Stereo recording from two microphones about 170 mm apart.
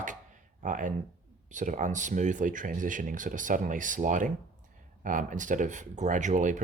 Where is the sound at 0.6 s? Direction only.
50° right (ahead or behind).